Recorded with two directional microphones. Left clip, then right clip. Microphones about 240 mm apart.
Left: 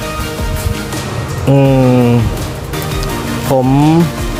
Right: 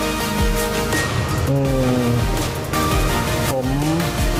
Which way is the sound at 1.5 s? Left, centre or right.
Left.